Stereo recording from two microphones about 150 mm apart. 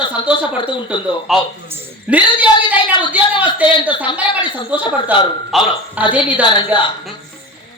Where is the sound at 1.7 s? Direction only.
10° right (ahead or behind).